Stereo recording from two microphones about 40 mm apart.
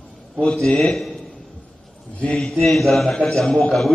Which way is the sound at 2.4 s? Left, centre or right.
Centre.